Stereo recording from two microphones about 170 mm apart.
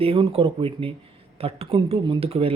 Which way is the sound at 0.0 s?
35° right (ahead or behind).